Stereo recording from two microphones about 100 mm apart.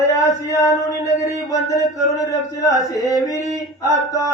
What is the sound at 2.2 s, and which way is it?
Speech, 35° left (ahead or behind).